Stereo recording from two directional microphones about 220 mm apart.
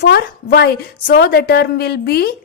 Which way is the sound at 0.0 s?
50° left (ahead or behind).